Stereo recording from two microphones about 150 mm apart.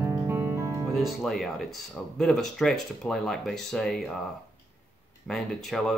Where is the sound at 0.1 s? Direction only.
25° right (ahead or behind).